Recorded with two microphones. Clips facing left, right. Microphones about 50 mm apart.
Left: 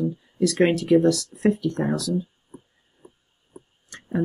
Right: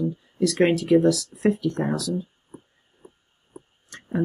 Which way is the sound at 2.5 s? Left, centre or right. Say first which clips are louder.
Even; right.